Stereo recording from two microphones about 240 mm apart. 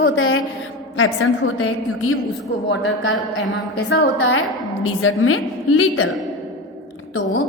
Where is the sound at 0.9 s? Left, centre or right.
Left.